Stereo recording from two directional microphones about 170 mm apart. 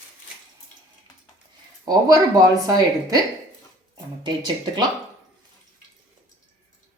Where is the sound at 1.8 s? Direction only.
20° right (ahead or behind).